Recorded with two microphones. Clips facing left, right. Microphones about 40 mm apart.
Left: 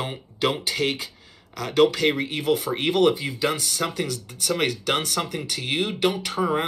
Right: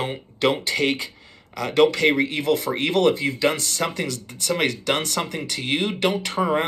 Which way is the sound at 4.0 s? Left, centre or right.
Right.